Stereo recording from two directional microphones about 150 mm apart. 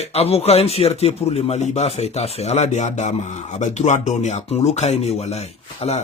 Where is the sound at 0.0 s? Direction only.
45° left (ahead or behind).